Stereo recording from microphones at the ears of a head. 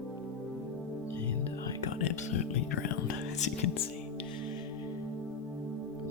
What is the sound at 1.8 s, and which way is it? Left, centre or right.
Speech, left.